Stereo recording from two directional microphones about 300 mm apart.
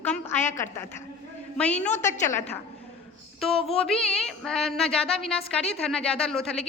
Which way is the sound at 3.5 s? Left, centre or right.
Centre.